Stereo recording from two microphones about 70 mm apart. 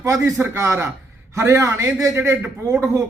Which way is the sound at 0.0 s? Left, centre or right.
Right.